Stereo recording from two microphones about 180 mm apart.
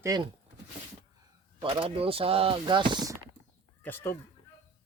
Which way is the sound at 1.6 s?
30° right (ahead or behind).